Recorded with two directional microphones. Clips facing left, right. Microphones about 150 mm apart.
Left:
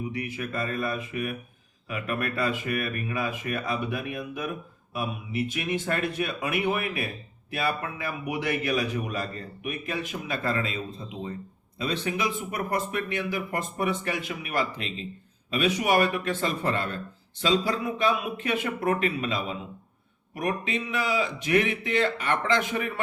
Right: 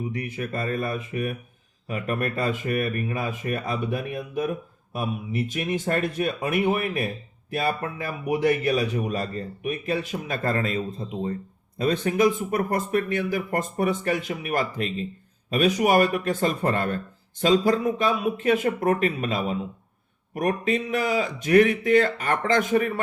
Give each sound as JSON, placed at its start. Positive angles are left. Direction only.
{"t": 0.1, "sound": "a man's voice", "side_deg": -40}